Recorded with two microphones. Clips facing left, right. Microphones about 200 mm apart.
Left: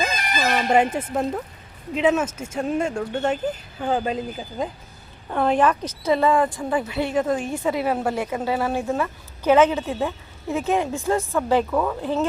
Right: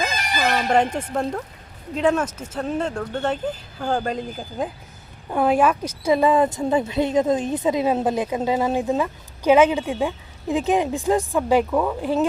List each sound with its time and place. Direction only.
0.4 s a woman's voice: 5° left (ahead or behind); by 12.3 s 15° right (ahead or behind)